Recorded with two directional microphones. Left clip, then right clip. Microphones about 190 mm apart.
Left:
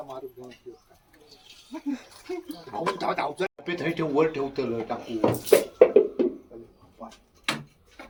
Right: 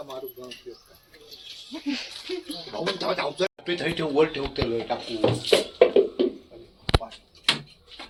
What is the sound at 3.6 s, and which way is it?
Speech, 55° left (ahead or behind).